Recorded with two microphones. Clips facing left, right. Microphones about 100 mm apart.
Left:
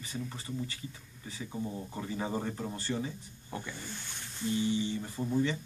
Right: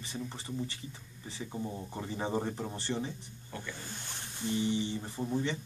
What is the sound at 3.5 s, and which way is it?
Speech, 20° left (ahead or behind).